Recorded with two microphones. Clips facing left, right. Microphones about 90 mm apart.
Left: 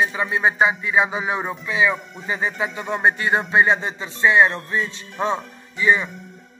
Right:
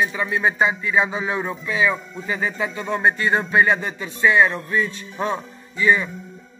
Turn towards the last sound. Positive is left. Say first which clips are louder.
# even
turn(degrees=20)  # may be behind; listen again after turning